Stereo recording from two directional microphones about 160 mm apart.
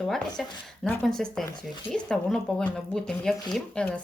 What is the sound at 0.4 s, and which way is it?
Speech, centre (ahead or behind).